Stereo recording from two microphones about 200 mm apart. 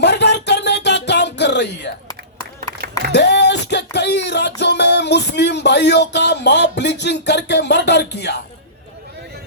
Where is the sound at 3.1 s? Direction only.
60° left (ahead or behind).